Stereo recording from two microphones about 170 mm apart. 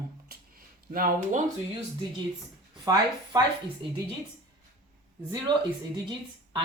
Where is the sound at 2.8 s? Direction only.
25° right (ahead or behind).